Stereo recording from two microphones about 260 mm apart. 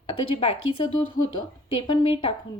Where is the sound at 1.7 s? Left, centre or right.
Centre.